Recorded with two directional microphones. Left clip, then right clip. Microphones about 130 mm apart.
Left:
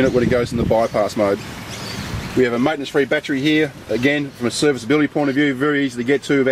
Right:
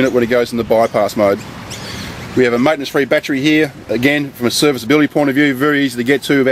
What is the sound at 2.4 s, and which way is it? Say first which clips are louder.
Speech: right 5 dB; 45° right (ahead or behind).